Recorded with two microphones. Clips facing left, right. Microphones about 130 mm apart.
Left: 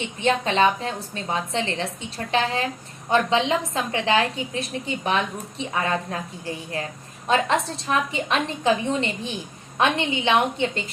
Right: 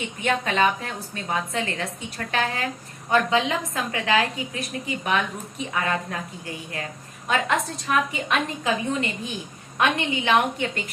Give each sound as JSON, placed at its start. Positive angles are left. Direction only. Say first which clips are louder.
{"t": 0.0, "sound": "a woman's voice", "louder": "left 3 dB", "side_deg": 25}